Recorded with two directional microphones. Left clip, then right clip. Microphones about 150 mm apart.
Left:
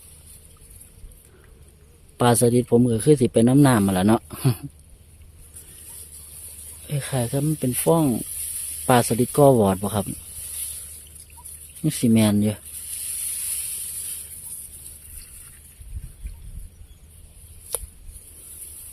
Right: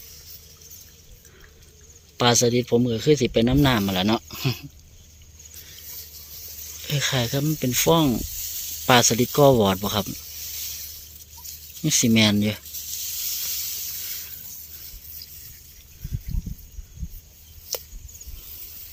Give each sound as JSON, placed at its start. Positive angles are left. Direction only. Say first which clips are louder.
{"t": 2.1, "sound": "speech", "louder": "left 1 dB", "side_deg": 30}
{"t": 6.8, "sound": "speech", "louder": "right 4 dB", "side_deg": 5}
{"t": 9.1, "sound": "speech", "louder": "left 1 dB", "side_deg": 15}
{"t": 11.8, "sound": "speech", "louder": "right 2 dB", "side_deg": 20}